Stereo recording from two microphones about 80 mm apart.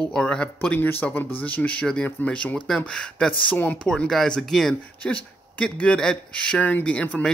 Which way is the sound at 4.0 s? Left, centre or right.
Centre.